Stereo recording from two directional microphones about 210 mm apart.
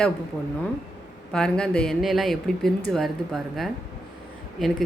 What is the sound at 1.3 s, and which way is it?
A woman's voice, 5° left (ahead or behind).